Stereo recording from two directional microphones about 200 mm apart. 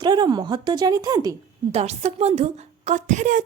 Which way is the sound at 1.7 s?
30° right (ahead or behind).